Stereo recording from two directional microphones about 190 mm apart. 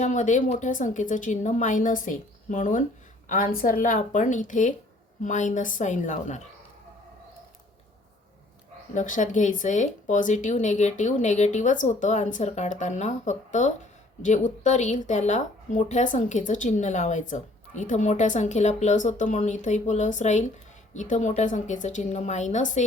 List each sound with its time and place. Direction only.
0.0 s speech: 40° left (ahead or behind)
9.0 s speech: 40° left (ahead or behind)